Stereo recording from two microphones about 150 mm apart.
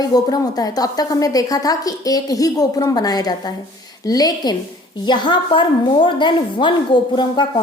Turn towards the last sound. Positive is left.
turn(degrees=30)  # may be behind; listen again after turning